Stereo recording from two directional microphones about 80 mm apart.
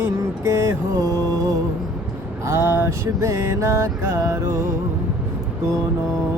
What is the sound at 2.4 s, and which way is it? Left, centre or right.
Music, right.